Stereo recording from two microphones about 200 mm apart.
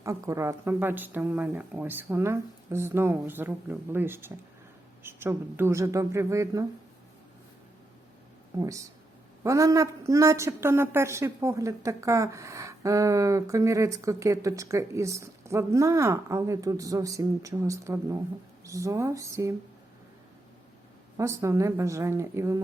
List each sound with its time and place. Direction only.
0.0 s a woman's voice: 15° right (ahead or behind)
8.5 s a woman's voice: 15° right (ahead or behind)
21.2 s a woman's voice: 15° right (ahead or behind)